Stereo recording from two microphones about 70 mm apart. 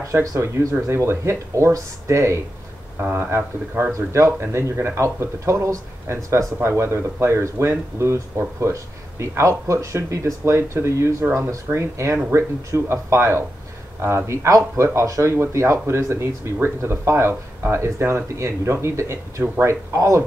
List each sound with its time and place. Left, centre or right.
0.0 s speech: right
3.0 s speech: right
3.9 s speech: right